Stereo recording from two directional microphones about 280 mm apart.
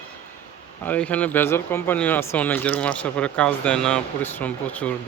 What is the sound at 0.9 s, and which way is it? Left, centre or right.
Speech, centre.